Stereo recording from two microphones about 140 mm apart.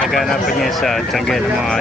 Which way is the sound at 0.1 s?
Centre (ahead or behind).